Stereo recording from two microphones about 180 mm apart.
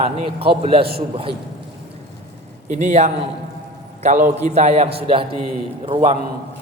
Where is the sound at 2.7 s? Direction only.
40° right (ahead or behind).